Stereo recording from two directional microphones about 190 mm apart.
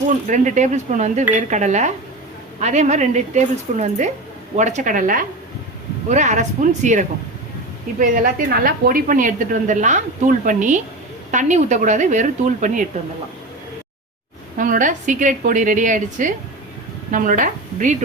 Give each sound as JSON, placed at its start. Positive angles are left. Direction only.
{"t": 0.3, "sound": "a woman's voice", "side_deg": -40}
{"t": 14.5, "sound": "a woman's voice", "side_deg": -45}